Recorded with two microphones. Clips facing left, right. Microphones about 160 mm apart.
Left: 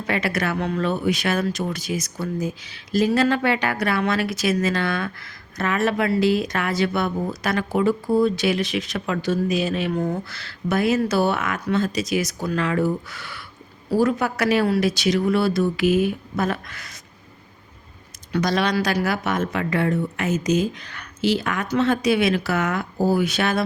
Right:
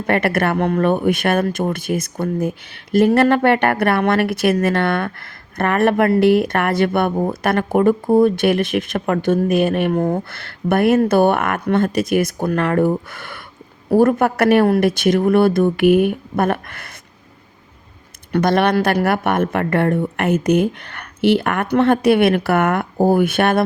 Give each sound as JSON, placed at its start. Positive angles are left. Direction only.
{"t": 0.0, "sound": "speech", "side_deg": -60}
{"t": 18.3, "sound": "speech", "side_deg": -55}